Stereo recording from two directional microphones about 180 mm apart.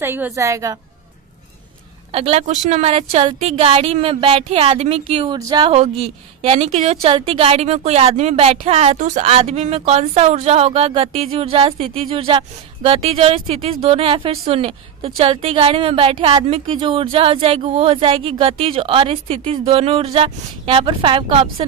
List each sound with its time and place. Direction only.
0.0 s a woman's voice: 15° right (ahead or behind)
2.1 s a woman's voice: 35° right (ahead or behind)